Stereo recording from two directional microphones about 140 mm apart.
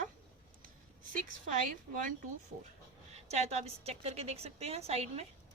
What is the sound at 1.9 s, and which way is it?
Speech, 75° right (ahead or behind).